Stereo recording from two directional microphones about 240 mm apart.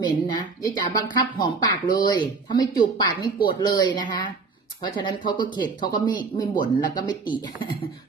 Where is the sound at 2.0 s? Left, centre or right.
Centre.